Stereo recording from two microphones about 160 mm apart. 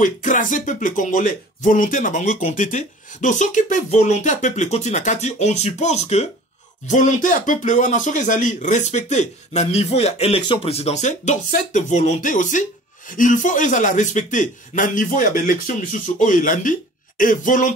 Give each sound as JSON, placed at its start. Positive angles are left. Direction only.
{"t": 0.0, "sound": "speech", "side_deg": 55}